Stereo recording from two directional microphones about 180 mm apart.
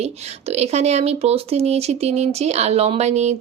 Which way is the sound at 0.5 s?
35° right (ahead or behind).